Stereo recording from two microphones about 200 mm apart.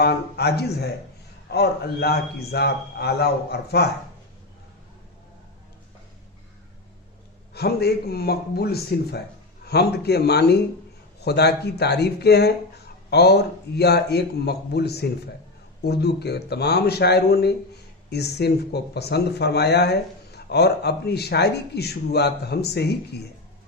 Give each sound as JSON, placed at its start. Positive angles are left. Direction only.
{"t": 0.0, "sound": "a man's voice", "side_deg": 55}
{"t": 7.5, "sound": "a man's voice", "side_deg": 55}